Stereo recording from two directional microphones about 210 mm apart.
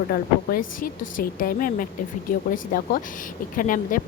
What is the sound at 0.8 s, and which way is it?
A woman's voice, 40° left (ahead or behind).